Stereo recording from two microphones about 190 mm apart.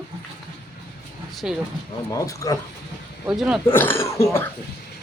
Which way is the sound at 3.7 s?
10° left (ahead or behind).